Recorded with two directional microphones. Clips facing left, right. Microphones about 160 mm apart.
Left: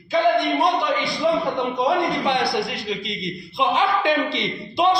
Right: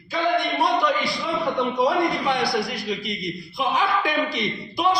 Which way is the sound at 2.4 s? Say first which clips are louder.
Left 1 dB; 25° left (ahead or behind).